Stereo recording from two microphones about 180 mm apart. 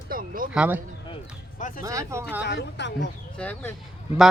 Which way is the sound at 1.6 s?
45° left (ahead or behind).